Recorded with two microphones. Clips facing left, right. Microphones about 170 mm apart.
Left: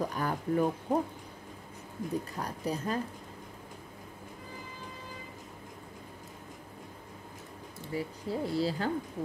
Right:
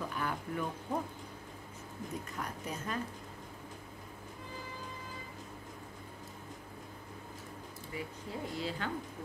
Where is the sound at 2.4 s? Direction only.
35° left (ahead or behind).